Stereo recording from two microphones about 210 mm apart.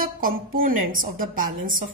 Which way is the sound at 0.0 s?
40° right (ahead or behind).